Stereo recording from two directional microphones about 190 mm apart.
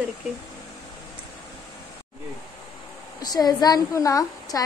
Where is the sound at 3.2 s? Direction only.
20° left (ahead or behind).